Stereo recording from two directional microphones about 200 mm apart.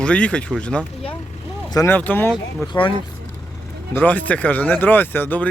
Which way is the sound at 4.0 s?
10° left (ahead or behind).